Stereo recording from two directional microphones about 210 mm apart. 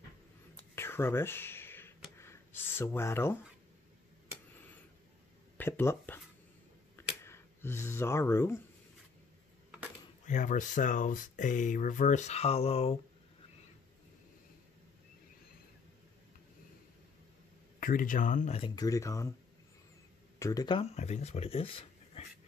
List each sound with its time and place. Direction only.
0.7 s a sound: 10° left (ahead or behind)
5.6 s speech: 10° left (ahead or behind)
7.0 s a sound: 10° left (ahead or behind)
10.2 s speech: 35° left (ahead or behind)
17.7 s speech: 40° left (ahead or behind)
18.8 s speech: 15° left (ahead or behind)
20.3 s speech: 15° left (ahead or behind)